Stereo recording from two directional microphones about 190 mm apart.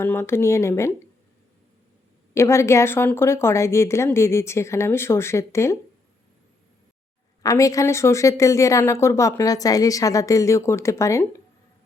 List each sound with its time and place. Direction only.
0.0 s speech: 10° left (ahead or behind)
2.3 s speech: 15° left (ahead or behind)
7.4 s speech: 15° left (ahead or behind)